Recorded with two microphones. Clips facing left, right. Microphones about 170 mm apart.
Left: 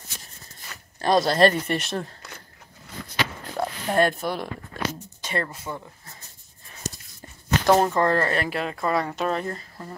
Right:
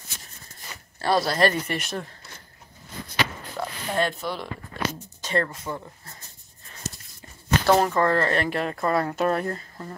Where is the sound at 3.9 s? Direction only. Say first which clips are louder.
Left 4 dB; 50° left (ahead or behind).